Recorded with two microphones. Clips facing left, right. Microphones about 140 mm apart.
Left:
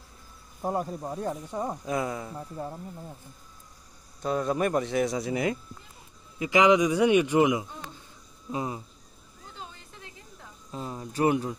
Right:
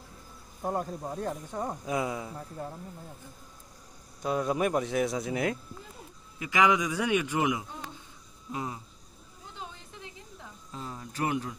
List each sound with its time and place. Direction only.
0.6 s speech: 10° left (ahead or behind)
1.9 s speech: 5° right (ahead or behind)
2.3 s speech: 15° left (ahead or behind)
4.2 s speech: 5° right (ahead or behind)
6.4 s speech: 20° left (ahead or behind)
9.6 s a sound: 20° right (ahead or behind)
10.7 s speech: 20° left (ahead or behind)